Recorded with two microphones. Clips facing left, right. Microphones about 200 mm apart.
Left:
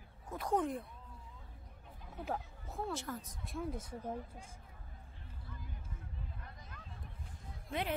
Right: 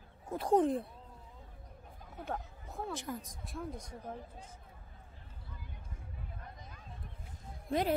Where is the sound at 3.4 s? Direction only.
Centre (ahead or behind).